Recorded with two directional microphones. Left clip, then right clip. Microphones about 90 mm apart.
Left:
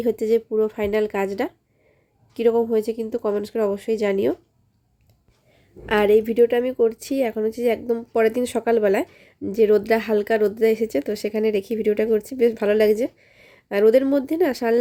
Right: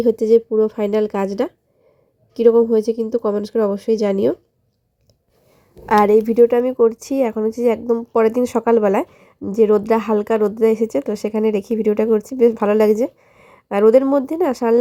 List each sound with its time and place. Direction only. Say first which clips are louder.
0.0 s speech: right 6 dB; 30° right (ahead or behind)
5.8 s a woman's voice: right 4 dB; 35° right (ahead or behind); by 14.8 s 20° right (ahead or behind)